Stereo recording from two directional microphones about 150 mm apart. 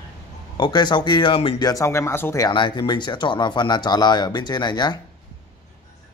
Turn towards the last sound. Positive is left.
turn(degrees=30)  # may be behind; listen again after turning